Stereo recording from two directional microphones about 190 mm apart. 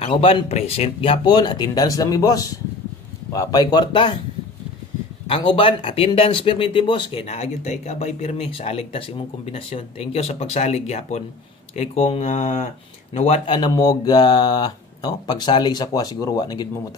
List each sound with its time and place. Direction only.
0.0 s speech: 30° left (ahead or behind)
5.3 s speech: 25° left (ahead or behind)
13.6 s speech: 20° left (ahead or behind)